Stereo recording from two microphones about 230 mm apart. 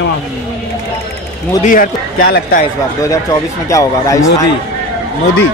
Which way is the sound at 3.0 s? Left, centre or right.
Centre.